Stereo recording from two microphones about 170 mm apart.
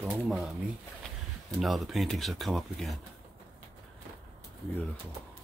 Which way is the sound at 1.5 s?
Centre (ahead or behind).